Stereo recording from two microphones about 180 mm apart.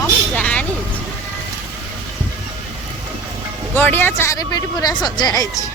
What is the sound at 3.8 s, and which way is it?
Speech, 10° left (ahead or behind).